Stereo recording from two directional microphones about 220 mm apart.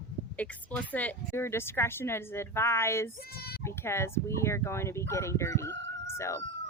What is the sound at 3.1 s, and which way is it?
Speech, 45° left (ahead or behind).